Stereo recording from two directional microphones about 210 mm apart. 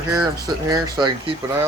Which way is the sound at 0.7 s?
20° right (ahead or behind).